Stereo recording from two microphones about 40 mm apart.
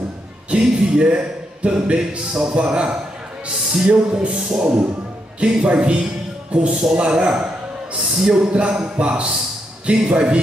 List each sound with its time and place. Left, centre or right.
0.5 s a man's voice: right
8.0 s a sound: centre
8.3 s a man's voice: right